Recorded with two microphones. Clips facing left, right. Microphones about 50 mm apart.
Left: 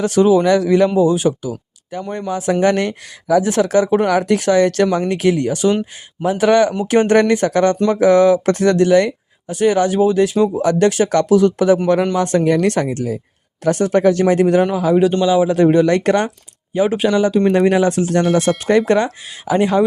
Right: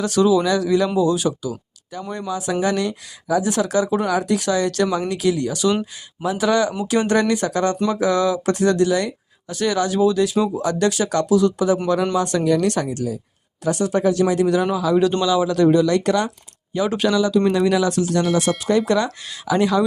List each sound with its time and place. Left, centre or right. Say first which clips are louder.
0.0 s speech: left 4 dB; left
9.5 s speech: left 6 dB; left
16.7 s speech: left 4 dB; left
17.2 s speech: left 4 dB; left